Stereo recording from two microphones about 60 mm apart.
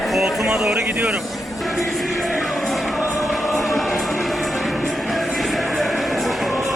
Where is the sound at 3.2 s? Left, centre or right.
Centre.